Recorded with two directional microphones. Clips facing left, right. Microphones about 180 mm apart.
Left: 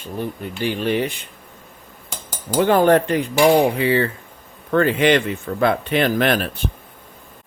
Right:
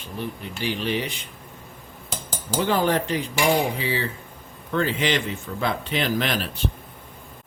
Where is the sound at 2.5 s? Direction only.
55° left (ahead or behind).